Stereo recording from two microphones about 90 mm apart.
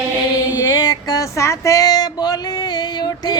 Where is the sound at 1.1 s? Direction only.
35° left (ahead or behind).